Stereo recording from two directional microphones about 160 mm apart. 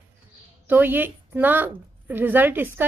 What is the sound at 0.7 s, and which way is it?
Speech, 10° right (ahead or behind).